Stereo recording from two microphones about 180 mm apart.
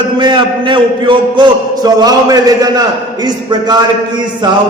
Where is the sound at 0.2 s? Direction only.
25° right (ahead or behind).